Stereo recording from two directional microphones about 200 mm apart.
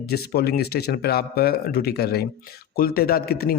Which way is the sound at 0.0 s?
50° left (ahead or behind).